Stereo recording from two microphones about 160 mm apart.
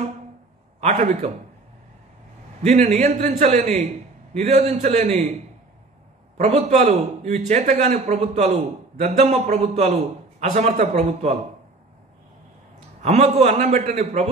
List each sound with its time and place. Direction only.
0.7 s a man's voice: 45° right (ahead or behind)
2.7 s a man's voice: 50° right (ahead or behind)
6.3 s a man's voice: 45° right (ahead or behind)
13.0 s a man's voice: 45° right (ahead or behind)